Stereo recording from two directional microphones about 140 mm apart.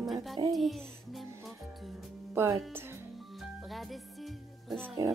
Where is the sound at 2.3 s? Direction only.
15° right (ahead or behind).